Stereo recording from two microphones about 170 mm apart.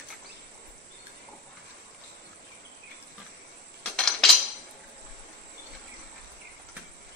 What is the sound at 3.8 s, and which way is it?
Cutlery, centre (ahead or behind).